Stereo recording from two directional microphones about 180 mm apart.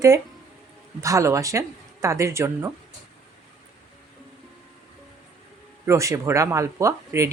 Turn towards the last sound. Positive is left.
turn(degrees=-15)  # may be behind; listen again after turning